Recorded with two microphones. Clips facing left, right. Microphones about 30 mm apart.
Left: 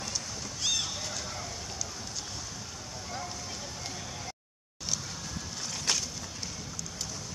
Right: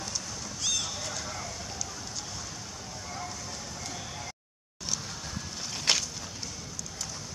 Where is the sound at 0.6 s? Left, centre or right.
Centre.